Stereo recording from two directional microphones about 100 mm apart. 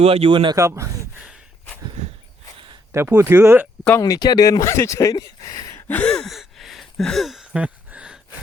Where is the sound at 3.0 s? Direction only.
20° right (ahead or behind).